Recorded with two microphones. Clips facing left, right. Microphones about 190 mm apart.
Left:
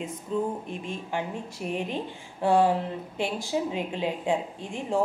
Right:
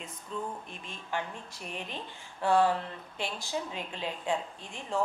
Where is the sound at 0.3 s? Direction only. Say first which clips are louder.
Left 9 dB; 5° left (ahead or behind).